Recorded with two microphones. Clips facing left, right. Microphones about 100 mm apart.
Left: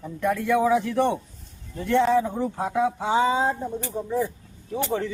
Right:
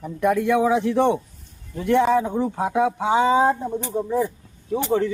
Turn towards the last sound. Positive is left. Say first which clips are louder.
# right 5 dB
turn(degrees=-10)  # may be behind; listen again after turning